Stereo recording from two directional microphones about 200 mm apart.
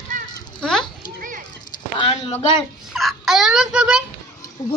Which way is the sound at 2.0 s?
25° left (ahead or behind).